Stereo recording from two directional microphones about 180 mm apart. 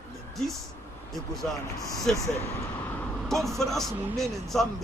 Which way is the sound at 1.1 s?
Centre (ahead or behind).